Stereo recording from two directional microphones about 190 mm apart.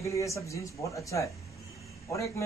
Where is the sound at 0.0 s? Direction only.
15° left (ahead or behind).